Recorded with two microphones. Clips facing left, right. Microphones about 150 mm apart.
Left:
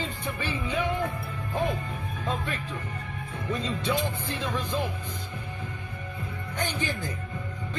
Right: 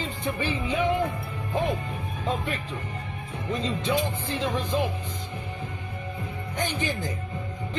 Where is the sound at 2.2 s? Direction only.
15° right (ahead or behind).